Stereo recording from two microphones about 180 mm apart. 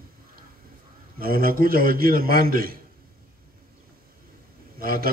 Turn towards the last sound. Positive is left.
turn(degrees=-55)  # may be behind; listen again after turning